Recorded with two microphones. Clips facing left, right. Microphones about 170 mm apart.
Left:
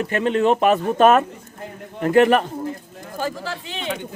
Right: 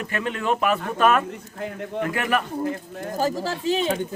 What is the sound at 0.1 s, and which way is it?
A man's voice, 25° left (ahead or behind).